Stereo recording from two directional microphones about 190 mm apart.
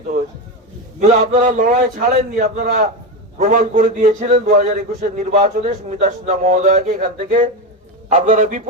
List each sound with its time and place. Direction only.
0.9 s a man's voice: 40° right (ahead or behind)